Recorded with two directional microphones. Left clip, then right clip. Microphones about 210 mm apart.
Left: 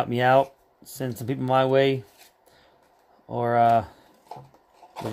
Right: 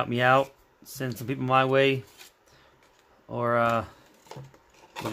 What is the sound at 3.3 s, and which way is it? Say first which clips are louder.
Speech: left 5 dB; 20° left (ahead or behind).